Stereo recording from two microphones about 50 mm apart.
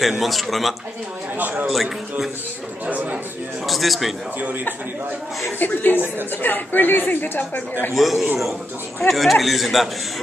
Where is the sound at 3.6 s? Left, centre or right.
Centre.